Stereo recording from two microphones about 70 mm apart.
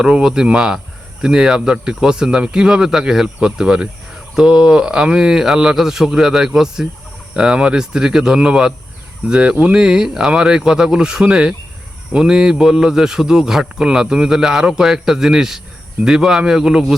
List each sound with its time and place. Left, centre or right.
0.0 s speech: centre